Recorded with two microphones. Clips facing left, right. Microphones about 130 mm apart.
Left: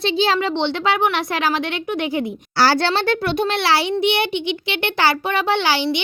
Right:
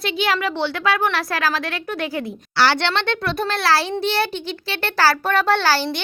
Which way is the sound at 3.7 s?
20° left (ahead or behind).